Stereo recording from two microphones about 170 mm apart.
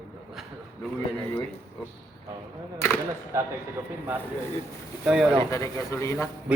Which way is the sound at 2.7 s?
15° left (ahead or behind).